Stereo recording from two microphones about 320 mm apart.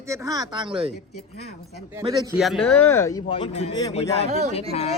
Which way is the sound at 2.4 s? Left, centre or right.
Centre.